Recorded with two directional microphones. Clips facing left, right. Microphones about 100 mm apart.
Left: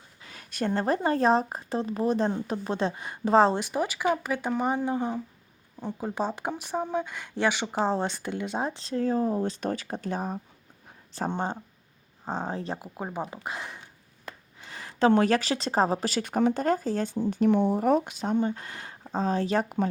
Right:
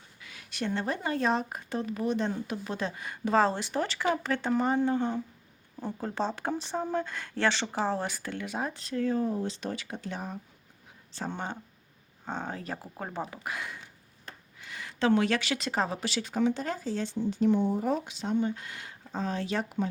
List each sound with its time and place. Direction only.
0.2 s speech: 40° left (ahead or behind); by 7.8 s 10° left (ahead or behind)
7.9 s speech: 25° left (ahead or behind); by 10.4 s 40° left (ahead or behind)
12.2 s speech: 30° left (ahead or behind)
12.8 s speech: 15° left (ahead or behind); by 19.9 s 45° left (ahead or behind)